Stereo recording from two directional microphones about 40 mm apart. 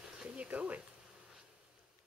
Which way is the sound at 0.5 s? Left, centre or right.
Right.